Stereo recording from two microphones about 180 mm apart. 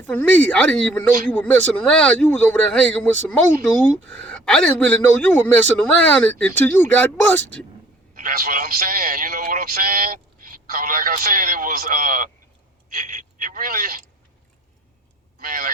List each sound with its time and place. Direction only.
0.0 s speech: 10° left (ahead or behind)
8.1 s a man's voice: 50° right (ahead or behind)
15.4 s speech: 50° right (ahead or behind)